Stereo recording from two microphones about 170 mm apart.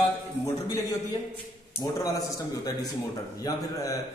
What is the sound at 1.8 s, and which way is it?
A man's voice, 20° left (ahead or behind).